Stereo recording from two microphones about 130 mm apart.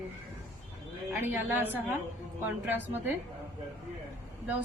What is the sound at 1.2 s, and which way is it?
A woman's voice, 15° right (ahead or behind).